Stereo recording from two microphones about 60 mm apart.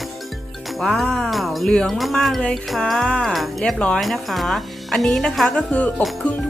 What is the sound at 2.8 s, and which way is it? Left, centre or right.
Music, centre.